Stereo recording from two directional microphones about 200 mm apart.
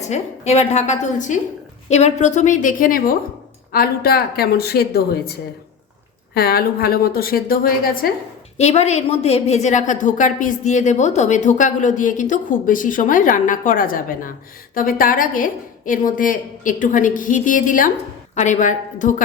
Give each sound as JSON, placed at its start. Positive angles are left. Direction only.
{"t": 0.0, "sound": "a woman's voice", "side_deg": 35}
{"t": 6.3, "sound": "a woman's voice", "side_deg": 50}
{"t": 8.5, "sound": "a woman's voice", "side_deg": 35}